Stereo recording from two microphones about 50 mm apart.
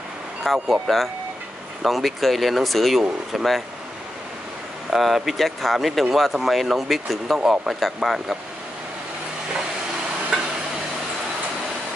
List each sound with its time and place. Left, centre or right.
0.4 s speech: centre
4.9 s speech: centre
7.3 s speech: centre
7.6 s speech: centre